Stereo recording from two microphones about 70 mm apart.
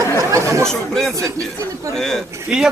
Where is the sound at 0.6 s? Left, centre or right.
Centre.